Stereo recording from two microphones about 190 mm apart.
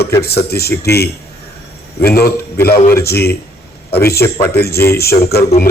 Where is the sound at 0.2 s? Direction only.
55° left (ahead or behind).